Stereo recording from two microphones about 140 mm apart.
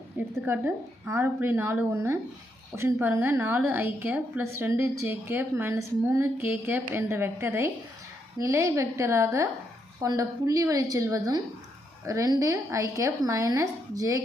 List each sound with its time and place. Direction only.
0.2 s a woman's voice: 15° right (ahead or behind)